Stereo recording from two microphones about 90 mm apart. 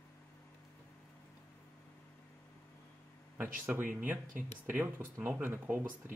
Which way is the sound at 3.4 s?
20° right (ahead or behind).